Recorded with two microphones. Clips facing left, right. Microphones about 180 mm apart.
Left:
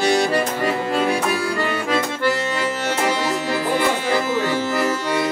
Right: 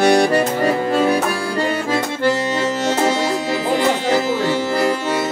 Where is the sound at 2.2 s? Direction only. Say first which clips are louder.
Right 3 dB; 25° right (ahead or behind).